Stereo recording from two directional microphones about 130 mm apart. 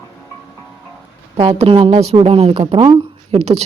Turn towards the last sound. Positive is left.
turn(degrees=-55)  # may be behind; listen again after turning